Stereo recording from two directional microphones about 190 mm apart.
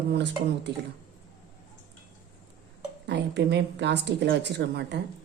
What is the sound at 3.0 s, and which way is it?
A woman's voice, 65° right (ahead or behind).